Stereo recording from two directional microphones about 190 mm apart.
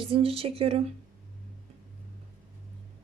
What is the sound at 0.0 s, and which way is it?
Speech, 30° right (ahead or behind).